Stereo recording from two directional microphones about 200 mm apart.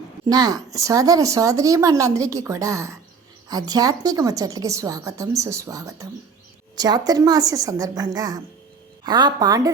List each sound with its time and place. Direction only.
0.3 s a woman's voice: 20° right (ahead or behind)